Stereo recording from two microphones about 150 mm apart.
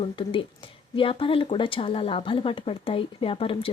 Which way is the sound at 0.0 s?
35° left (ahead or behind).